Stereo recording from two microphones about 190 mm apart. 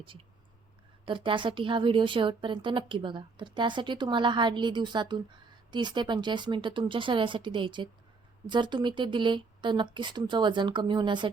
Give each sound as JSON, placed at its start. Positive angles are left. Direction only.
{"t": 1.0, "sound": "a woman's voice", "side_deg": -25}